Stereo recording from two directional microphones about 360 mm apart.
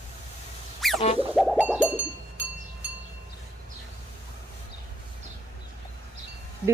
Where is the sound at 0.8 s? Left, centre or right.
Centre.